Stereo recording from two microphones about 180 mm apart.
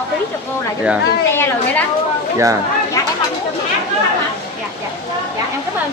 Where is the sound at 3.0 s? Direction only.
20° left (ahead or behind).